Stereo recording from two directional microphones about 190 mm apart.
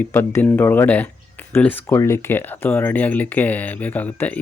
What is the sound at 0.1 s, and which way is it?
Speech, 10° left (ahead or behind).